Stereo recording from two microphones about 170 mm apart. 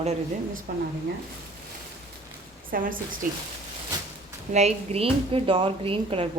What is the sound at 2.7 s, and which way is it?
Speech, 55° right (ahead or behind).